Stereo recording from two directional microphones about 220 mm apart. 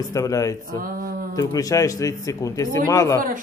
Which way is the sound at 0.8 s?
40° right (ahead or behind).